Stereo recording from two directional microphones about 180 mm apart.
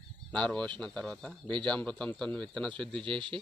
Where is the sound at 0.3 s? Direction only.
5° left (ahead or behind).